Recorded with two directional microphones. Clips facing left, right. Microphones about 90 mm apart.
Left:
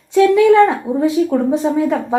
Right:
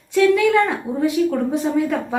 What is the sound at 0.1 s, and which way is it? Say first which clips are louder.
A woman's voice: left 5 dB; 25° left (ahead or behind).